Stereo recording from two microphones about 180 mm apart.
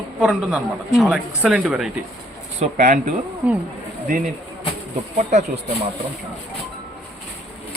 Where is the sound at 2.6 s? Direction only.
40° right (ahead or behind).